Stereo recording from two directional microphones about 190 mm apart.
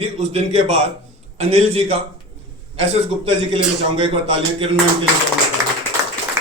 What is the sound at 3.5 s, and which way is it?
A man's voice, 30° right (ahead or behind).